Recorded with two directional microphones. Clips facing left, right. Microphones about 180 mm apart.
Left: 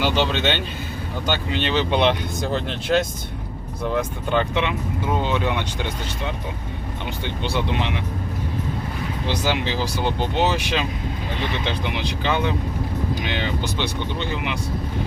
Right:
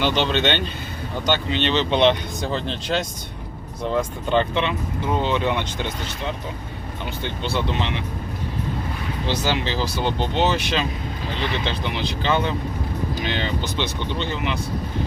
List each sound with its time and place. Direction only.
0.0 s speech: 10° left (ahead or behind)
4.3 s speech: 10° left (ahead or behind)
7.4 s speech: 15° left (ahead or behind)
9.2 s speech: 10° left (ahead or behind)